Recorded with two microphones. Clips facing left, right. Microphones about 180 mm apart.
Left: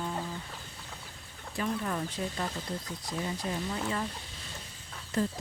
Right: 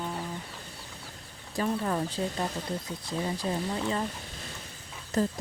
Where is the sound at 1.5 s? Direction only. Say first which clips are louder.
Right 4 dB; 35° right (ahead or behind).